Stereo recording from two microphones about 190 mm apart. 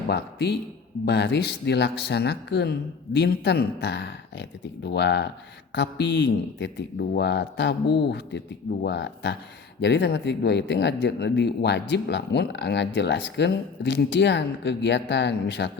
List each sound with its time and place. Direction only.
0.1 s a man's voice: 60° left (ahead or behind)